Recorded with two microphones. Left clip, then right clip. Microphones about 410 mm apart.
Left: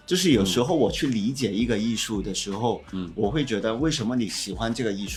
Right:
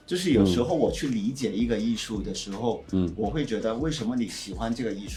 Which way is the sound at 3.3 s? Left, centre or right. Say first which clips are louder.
Left 2 dB; left.